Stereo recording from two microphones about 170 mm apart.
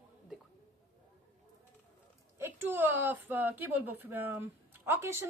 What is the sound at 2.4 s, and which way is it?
Speech, 15° right (ahead or behind).